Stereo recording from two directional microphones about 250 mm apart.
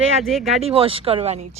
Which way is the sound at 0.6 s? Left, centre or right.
Right.